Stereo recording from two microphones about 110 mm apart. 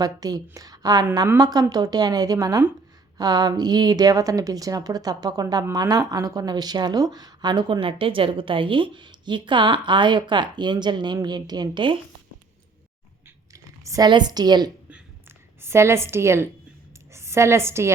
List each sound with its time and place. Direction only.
0.0 s a woman's voice: 35° right (ahead or behind)
13.5 s typing: 30° right (ahead or behind)
14.1 s a woman's voice: 40° right (ahead or behind)
15.6 s a woman's voice: 25° right (ahead or behind)